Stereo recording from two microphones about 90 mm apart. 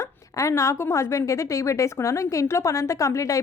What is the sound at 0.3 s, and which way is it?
A woman's voice, 35° left (ahead or behind).